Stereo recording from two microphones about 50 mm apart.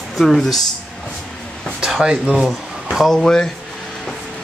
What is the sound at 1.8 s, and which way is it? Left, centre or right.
Speech, centre.